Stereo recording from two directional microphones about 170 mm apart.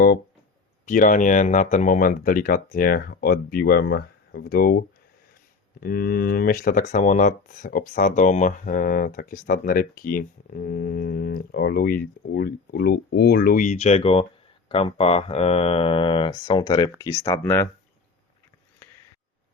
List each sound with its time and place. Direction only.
0.9 s speech: 50° left (ahead or behind)
5.8 s speech: 60° left (ahead or behind); by 17.7 s 15° left (ahead or behind)